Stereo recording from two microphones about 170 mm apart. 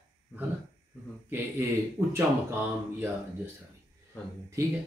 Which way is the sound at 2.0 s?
20° right (ahead or behind).